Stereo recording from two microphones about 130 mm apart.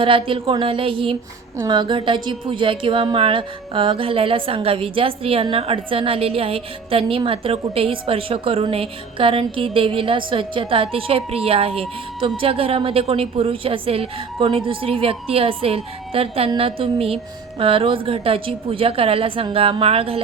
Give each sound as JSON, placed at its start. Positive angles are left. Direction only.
{"t": 0.0, "sound": "a woman's voice", "side_deg": -45}